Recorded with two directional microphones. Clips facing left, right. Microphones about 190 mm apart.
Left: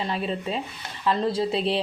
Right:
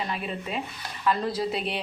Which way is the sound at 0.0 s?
30° left (ahead or behind).